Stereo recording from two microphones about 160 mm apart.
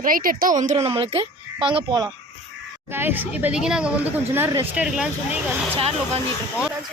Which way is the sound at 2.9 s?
10° right (ahead or behind).